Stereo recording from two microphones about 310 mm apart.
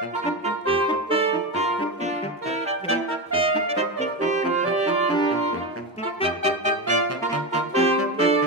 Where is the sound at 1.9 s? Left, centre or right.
Right.